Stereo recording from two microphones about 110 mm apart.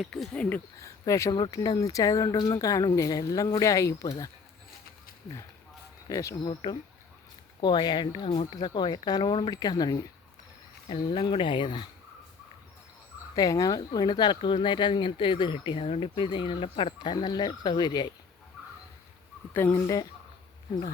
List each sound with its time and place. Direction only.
0.0 s speech: 5° left (ahead or behind)
0.8 s speech: 30° left (ahead or behind)
6.1 s speech: 30° left (ahead or behind)
6.4 s speech: 45° left (ahead or behind)
13.3 s speech: 35° left (ahead or behind)
19.5 s speech: 15° left (ahead or behind)